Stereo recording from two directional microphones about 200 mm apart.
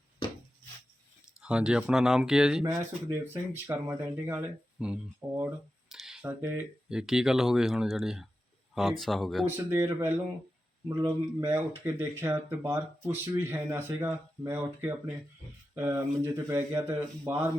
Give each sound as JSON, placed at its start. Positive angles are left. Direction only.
{"t": 1.4, "sound": "speech", "side_deg": -5}
{"t": 2.6, "sound": "speech", "side_deg": -15}
{"t": 5.9, "sound": "a sound", "side_deg": 0}
{"t": 6.4, "sound": "speech", "side_deg": -10}
{"t": 9.6, "sound": "speech", "side_deg": -15}